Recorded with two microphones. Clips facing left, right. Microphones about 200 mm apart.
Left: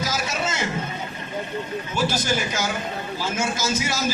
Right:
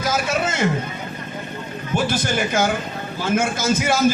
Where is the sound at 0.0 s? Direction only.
55° right (ahead or behind).